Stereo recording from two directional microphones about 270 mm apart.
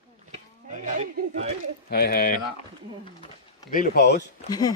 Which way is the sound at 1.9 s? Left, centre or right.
Left.